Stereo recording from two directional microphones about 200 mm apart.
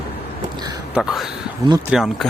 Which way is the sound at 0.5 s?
20° right (ahead or behind).